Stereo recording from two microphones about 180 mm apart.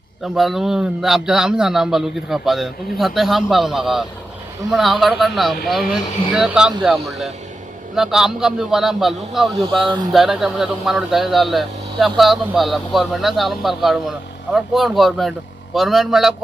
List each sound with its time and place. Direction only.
0.3 s a man's voice: centre (ahead or behind)